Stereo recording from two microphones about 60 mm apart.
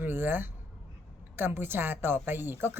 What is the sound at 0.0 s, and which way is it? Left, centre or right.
A woman's voice, right.